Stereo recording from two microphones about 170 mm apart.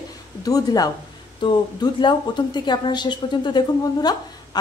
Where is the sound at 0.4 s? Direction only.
20° left (ahead or behind).